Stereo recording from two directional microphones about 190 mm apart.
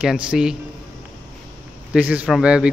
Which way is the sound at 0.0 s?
5° right (ahead or behind).